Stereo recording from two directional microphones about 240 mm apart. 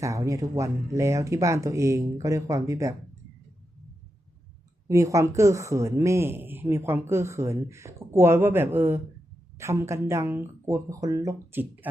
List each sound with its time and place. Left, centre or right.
0.0 s speech: centre
4.9 s speech: centre